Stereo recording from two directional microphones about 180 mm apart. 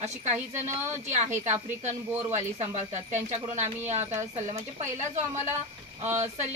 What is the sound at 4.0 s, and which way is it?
Speech, 15° right (ahead or behind).